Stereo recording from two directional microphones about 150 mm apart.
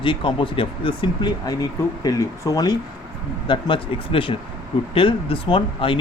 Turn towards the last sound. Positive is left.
turn(degrees=35)  # may be behind; listen again after turning